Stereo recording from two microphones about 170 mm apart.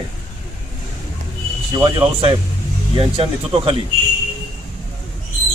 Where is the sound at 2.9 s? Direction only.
35° right (ahead or behind).